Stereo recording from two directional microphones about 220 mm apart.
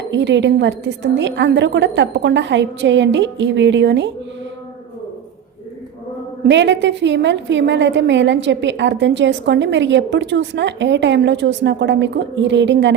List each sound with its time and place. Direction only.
0.1 s a woman's voice: 55° right (ahead or behind)
6.4 s a woman's voice: 55° right (ahead or behind)